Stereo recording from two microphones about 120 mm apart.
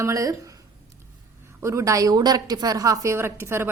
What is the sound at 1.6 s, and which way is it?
A woman's voice, 25° right (ahead or behind).